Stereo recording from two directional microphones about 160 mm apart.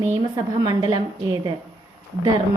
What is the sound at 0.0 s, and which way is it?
A woman's voice, 20° right (ahead or behind).